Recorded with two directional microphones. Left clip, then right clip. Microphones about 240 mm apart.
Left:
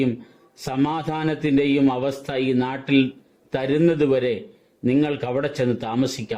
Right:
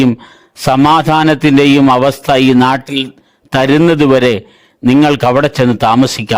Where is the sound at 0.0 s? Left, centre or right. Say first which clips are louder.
Right 11 dB; right.